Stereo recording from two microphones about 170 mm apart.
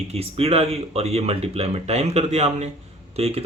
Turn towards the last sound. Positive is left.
turn(degrees=-35)  # may be behind; listen again after turning